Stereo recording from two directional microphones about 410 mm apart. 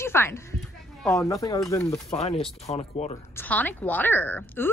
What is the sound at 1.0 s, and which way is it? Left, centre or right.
Speech, centre.